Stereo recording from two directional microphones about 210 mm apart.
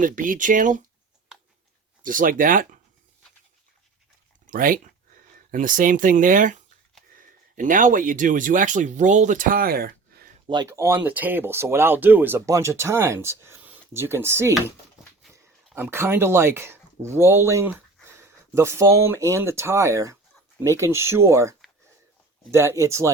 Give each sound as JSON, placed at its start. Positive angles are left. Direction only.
{"t": 0.0, "sound": "speech", "side_deg": -40}
{"t": 2.0, "sound": "speech", "side_deg": -40}
{"t": 4.4, "sound": "speech", "side_deg": -40}
{"t": 10.4, "sound": "speech", "side_deg": -20}
{"t": 15.7, "sound": "speech", "side_deg": -10}
{"t": 22.5, "sound": "speech", "side_deg": -15}